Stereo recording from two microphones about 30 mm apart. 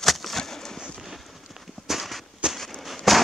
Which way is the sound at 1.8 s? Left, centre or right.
Centre.